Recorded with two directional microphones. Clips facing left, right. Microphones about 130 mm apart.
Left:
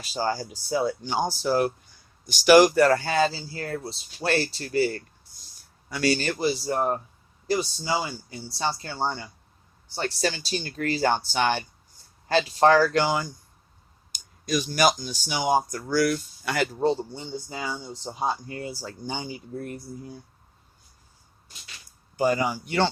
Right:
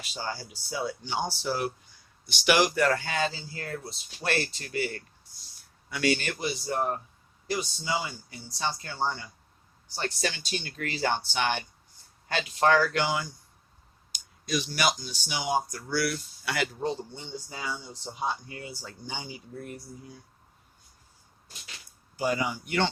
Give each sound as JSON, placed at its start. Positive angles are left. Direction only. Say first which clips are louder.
{"t": 0.0, "sound": "speech", "louder": "left 8 dB", "side_deg": 40}
{"t": 22.1, "sound": "speech", "louder": "left 5 dB", "side_deg": 45}